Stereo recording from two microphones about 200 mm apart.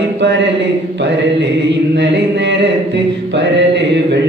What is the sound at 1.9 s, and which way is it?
Speech, 60° right (ahead or behind).